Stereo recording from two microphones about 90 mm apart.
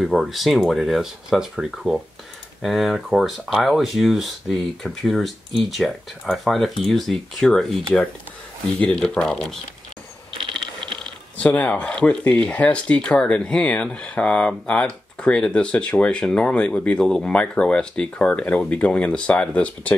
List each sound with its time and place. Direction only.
0.0 s speech: centre (ahead or behind)
8.9 s speech: 5° left (ahead or behind)
10.3 s ratchet: 65° right (ahead or behind)
11.3 s speech: 15° left (ahead or behind)